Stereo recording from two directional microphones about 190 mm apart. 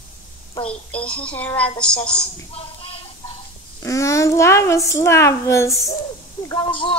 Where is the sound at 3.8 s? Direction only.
15° left (ahead or behind).